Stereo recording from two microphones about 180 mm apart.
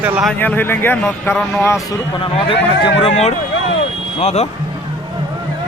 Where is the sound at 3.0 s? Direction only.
35° left (ahead or behind).